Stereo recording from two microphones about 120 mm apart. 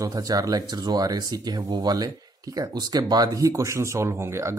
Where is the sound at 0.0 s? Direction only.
30° right (ahead or behind).